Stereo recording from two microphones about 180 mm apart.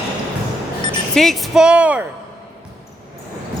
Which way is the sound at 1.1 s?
Centre (ahead or behind).